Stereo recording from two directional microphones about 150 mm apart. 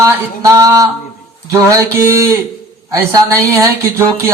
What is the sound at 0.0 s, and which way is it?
A man's voice, 20° right (ahead or behind).